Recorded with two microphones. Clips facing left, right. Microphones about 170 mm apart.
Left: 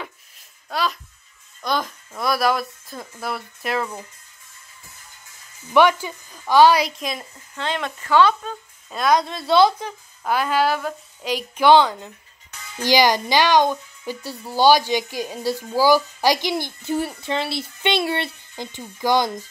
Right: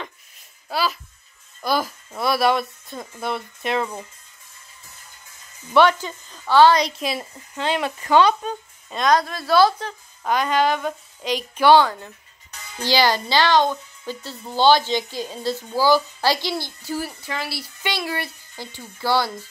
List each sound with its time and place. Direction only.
0.7 s a sound: 5° right (ahead or behind)
1.6 s speech: 5° right (ahead or behind)
5.7 s a woman's voice: 10° left (ahead or behind)
7.0 s speech: 5° right (ahead or behind)
8.9 s speech: 5° left (ahead or behind)
9.2 s a woman's voice: 25° left (ahead or behind)